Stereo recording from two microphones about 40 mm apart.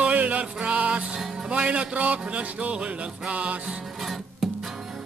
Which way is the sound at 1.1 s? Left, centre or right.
Centre.